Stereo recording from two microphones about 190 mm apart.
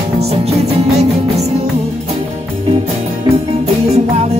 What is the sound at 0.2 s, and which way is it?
Music, 35° right (ahead or behind).